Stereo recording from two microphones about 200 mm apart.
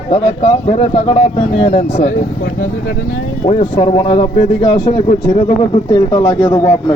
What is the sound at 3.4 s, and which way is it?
A man's voice, 30° left (ahead or behind).